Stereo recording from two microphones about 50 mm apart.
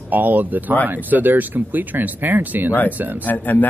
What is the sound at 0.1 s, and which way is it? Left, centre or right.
Speech, right.